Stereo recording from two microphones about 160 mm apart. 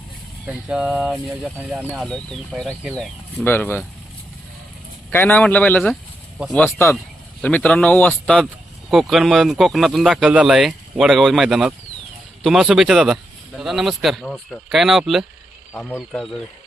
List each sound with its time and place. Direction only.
0.4 s speech: 5° right (ahead or behind)
1.8 s speech: 5° left (ahead or behind)
5.1 s speech: 10° left (ahead or behind)